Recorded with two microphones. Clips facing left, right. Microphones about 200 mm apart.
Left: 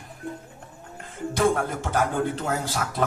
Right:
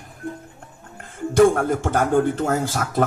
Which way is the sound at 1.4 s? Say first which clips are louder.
Right 8 dB; 50° right (ahead or behind).